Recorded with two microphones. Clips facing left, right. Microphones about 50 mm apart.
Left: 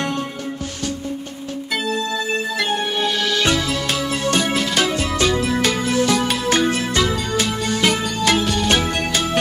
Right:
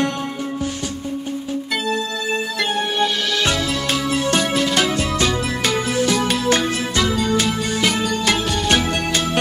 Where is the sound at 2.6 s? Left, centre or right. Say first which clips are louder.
Right 3 dB; centre.